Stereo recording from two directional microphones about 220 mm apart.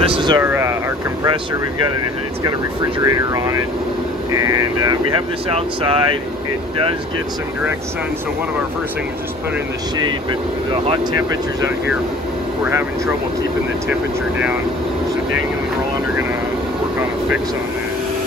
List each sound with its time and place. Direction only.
0.0 s speech: 25° right (ahead or behind)
0.4 s speech: 10° right (ahead or behind)
3.0 s speech: 15° right (ahead or behind)
12.6 s speech: 10° right (ahead or behind)